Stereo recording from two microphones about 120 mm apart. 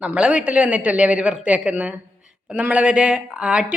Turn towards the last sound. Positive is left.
turn(degrees=-10)  # may be behind; listen again after turning